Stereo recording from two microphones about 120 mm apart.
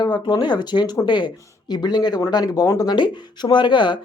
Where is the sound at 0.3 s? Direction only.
40° left (ahead or behind).